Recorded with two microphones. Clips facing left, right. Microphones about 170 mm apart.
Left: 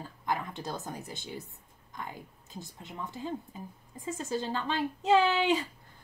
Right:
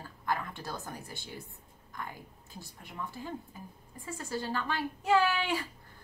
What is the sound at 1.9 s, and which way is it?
A woman's voice, 20° left (ahead or behind).